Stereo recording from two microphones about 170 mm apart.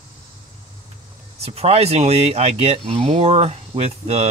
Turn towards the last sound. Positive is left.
turn(degrees=-40)  # may be behind; listen again after turning